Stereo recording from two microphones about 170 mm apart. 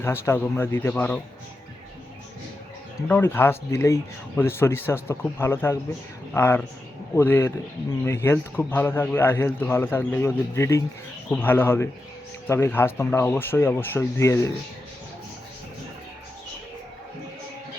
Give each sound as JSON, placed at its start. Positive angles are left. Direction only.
{"t": 0.0, "sound": "a man's voice", "side_deg": 15}
{"t": 3.1, "sound": "a man's voice", "side_deg": 10}